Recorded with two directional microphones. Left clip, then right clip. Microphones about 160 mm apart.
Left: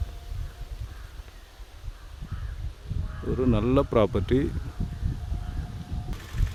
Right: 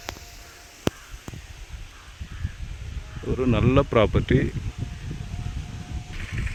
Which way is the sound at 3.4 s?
5° left (ahead or behind).